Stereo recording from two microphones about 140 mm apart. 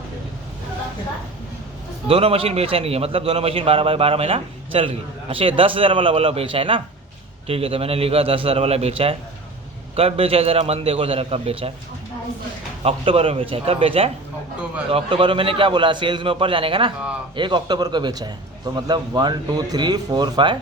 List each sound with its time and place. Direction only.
2.0 s a man's voice: 40° right (ahead or behind)
12.8 s a man's voice: 45° right (ahead or behind)